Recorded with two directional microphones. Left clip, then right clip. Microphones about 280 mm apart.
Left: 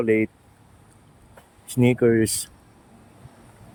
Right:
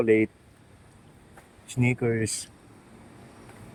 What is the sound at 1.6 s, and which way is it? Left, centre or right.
Speech, centre.